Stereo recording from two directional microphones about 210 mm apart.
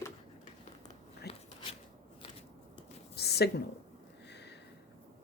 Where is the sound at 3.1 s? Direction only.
50° left (ahead or behind).